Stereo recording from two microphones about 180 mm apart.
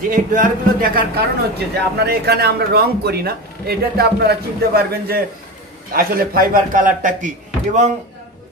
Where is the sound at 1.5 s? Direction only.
65° right (ahead or behind); by 7.9 s 45° right (ahead or behind).